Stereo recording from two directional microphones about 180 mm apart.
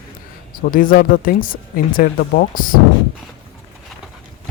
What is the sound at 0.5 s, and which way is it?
Speech, 50° left (ahead or behind).